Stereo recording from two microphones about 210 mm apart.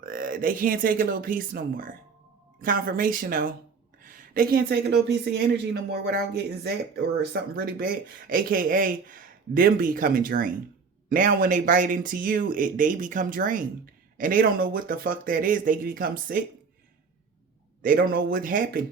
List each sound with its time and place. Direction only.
0.0 s speech: 45° right (ahead or behind)
17.8 s speech: 45° right (ahead or behind)